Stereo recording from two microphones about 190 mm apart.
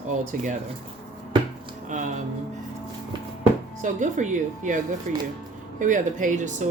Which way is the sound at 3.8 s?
40° right (ahead or behind).